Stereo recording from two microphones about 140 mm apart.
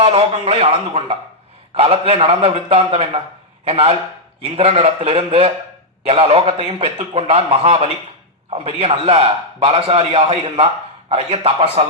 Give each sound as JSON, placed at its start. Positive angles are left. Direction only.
{"t": 0.0, "sound": "a man's voice", "side_deg": -45}